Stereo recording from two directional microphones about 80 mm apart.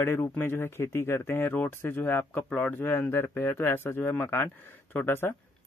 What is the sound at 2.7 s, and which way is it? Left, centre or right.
Speech, left.